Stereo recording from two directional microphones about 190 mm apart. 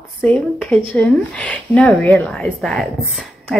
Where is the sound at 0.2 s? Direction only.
10° left (ahead or behind).